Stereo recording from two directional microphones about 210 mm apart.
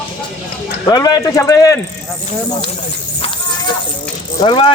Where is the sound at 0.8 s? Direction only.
20° left (ahead or behind).